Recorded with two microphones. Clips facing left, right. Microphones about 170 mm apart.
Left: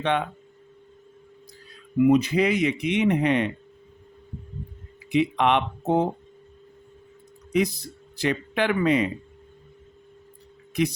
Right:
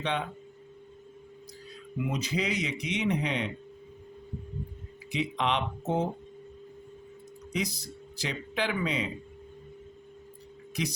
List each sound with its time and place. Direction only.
0.0 s speech: 55° left (ahead or behind)
2.0 s speech: 60° left (ahead or behind)
5.1 s speech: 60° left (ahead or behind)
8.1 s speech: 55° left (ahead or behind)